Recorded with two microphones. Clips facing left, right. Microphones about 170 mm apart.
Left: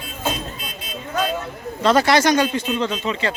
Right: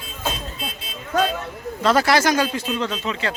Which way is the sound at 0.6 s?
25° right (ahead or behind).